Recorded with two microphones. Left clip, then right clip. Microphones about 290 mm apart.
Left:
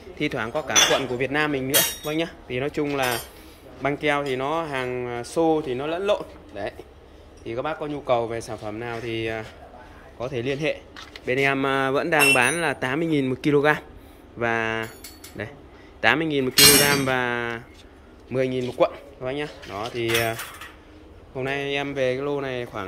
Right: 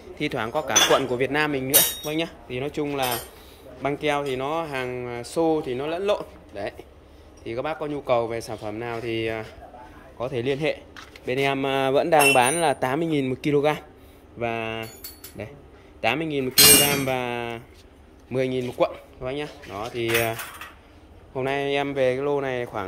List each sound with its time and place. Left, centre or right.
0.0 s speech: centre
16.0 s speech: centre
16.5 s speech: right
16.8 s speech: centre